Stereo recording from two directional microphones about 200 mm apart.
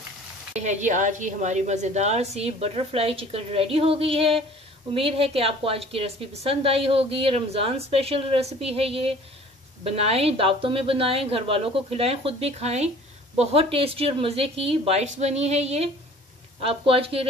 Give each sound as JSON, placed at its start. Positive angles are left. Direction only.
{"t": 0.6, "sound": "a woman's voice", "side_deg": -35}